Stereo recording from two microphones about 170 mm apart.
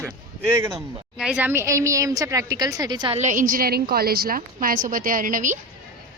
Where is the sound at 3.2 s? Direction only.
50° right (ahead or behind).